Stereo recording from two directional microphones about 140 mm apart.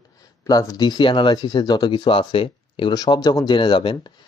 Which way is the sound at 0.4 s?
25° left (ahead or behind).